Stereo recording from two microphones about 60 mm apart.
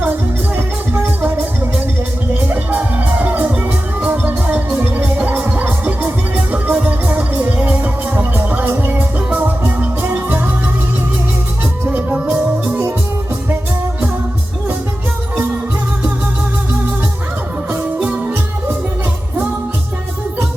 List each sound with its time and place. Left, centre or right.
0.0 s music: right
2.5 s music: right
11.9 s music: right